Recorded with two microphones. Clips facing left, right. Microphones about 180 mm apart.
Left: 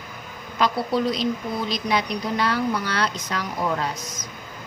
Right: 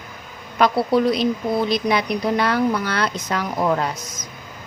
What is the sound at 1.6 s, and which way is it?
Speech, 55° right (ahead or behind).